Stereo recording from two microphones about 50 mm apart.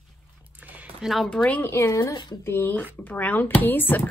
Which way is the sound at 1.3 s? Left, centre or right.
Left.